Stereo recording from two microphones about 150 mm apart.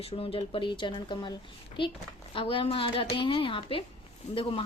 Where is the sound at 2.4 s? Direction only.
35° left (ahead or behind).